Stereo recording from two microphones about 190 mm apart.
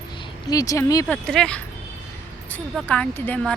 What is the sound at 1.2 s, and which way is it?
Speech, 5° left (ahead or behind).